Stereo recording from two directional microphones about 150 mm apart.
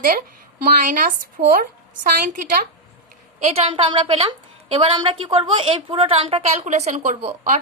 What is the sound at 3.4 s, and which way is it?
A woman's voice, 40° right (ahead or behind).